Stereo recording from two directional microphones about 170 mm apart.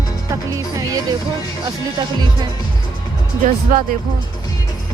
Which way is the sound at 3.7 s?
55° right (ahead or behind).